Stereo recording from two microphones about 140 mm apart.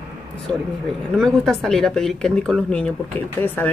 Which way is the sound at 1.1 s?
5° left (ahead or behind).